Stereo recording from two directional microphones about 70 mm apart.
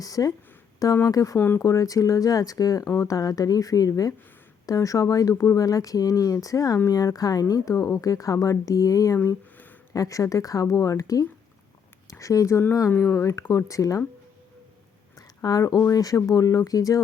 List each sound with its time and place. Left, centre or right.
0.0 s speech: left
5.3 s speech: left
15.4 s speech: left